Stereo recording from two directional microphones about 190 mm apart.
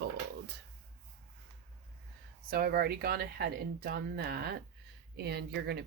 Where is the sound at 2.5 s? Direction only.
55° right (ahead or behind).